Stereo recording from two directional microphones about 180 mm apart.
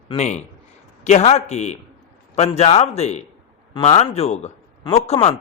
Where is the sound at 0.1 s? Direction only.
40° left (ahead or behind).